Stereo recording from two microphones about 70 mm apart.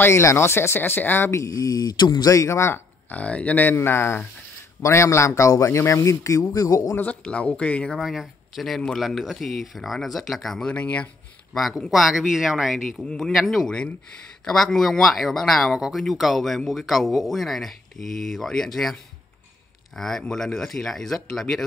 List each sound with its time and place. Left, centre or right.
0.0 s speech: left
1.3 s speech: left
2.2 s speech: left
3.1 s speech: centre
3.7 s speech: left
7.0 s speech: centre
8.0 s speech: centre
10.7 s speech: centre
11.9 s speech: centre
13.0 s speech: centre
13.3 s speech: centre
20.0 s speech: centre